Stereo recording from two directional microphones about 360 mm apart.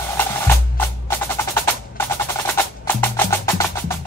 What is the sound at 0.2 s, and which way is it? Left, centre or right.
Percussion, centre.